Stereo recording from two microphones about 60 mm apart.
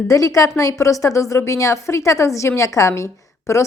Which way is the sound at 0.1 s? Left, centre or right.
Left.